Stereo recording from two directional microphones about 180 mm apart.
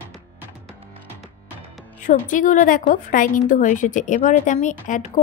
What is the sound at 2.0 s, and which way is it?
Speech, 45° left (ahead or behind).